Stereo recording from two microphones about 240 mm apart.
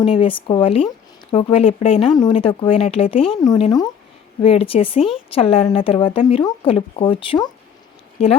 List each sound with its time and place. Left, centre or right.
0.0 s speech: left